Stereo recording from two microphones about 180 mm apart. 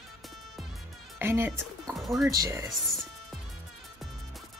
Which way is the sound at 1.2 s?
15° right (ahead or behind).